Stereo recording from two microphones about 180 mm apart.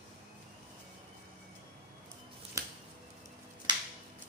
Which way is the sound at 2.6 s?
20° right (ahead or behind).